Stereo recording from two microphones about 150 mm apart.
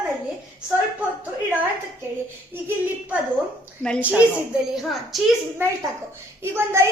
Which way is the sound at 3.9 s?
10° right (ahead or behind).